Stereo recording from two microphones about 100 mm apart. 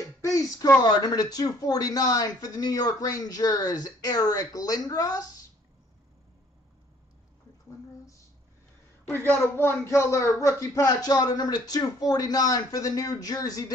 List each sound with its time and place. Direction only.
0.2 s a sound: 35° left (ahead or behind)
0.8 s speech: 40° left (ahead or behind)
9.1 s speech: 20° left (ahead or behind); by 13.7 s 40° left (ahead or behind)